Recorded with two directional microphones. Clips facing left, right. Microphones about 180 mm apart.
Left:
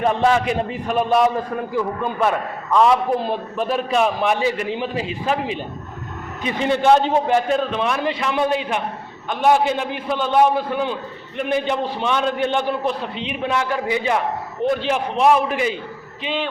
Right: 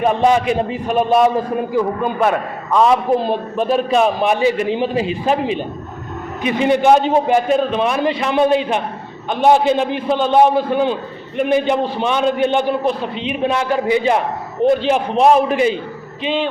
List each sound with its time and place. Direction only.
0.0 s a man's voice: 15° right (ahead or behind)